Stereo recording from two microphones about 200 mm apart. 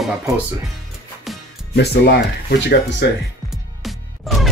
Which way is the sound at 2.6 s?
60° left (ahead or behind).